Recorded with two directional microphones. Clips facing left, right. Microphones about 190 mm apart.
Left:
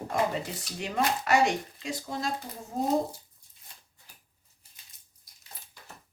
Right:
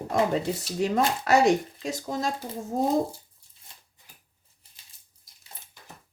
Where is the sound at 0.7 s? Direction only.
40° right (ahead or behind).